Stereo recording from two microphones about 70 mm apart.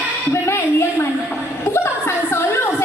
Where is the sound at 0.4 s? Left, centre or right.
Left.